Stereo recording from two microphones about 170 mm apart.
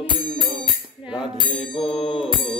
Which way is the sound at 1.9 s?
Centre (ahead or behind).